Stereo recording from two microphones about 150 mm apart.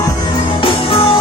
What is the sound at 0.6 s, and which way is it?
Music, 35° left (ahead or behind).